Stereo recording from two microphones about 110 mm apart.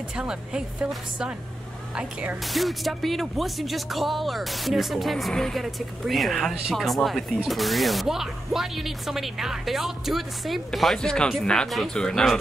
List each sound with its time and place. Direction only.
0.1 s speech: 5° right (ahead or behind)
2.4 s speech: centre (ahead or behind)